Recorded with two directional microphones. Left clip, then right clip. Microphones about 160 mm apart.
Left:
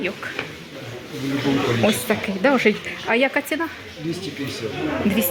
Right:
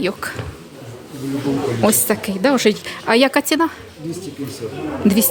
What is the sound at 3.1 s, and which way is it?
Speech, 55° right (ahead or behind).